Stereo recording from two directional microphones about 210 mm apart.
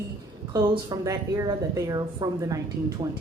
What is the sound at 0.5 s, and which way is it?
A woman's voice, 20° right (ahead or behind).